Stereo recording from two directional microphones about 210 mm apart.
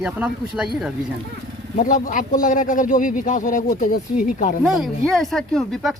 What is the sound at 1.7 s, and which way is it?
Speech, 40° left (ahead or behind).